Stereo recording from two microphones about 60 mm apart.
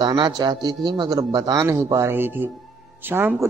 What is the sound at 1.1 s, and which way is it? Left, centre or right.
Speech, right.